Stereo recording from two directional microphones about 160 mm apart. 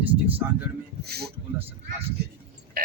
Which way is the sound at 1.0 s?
80° right.